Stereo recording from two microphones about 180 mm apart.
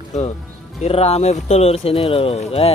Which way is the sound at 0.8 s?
35° left (ahead or behind).